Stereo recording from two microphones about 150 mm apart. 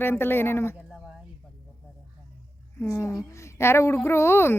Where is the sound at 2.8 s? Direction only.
15° left (ahead or behind).